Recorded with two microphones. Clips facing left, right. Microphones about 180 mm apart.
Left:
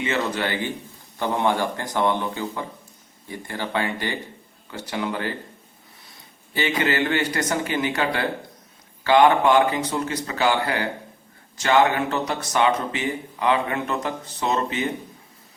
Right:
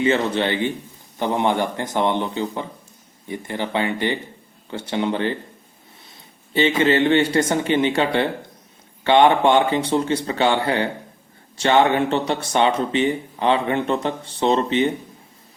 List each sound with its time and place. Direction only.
0.0 s speech: 30° right (ahead or behind)
6.5 s speech: 25° right (ahead or behind)